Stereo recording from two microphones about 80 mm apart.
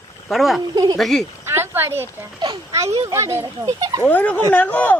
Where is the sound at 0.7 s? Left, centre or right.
Right.